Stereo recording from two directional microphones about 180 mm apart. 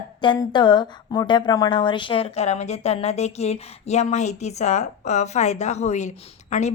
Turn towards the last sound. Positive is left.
turn(degrees=40)  # may be behind; listen again after turning